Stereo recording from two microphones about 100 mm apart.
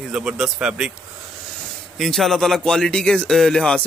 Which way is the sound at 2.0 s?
Centre (ahead or behind).